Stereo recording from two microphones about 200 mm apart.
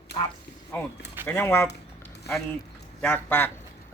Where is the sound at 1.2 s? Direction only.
10° left (ahead or behind).